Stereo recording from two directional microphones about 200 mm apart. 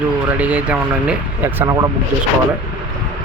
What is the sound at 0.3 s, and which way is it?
Speech, 5° right (ahead or behind).